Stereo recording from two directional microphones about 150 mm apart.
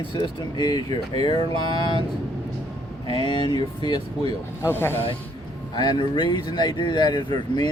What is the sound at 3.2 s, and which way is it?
Speech, 30° left (ahead or behind).